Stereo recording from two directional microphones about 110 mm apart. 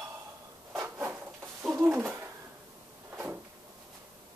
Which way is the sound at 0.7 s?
25° right (ahead or behind).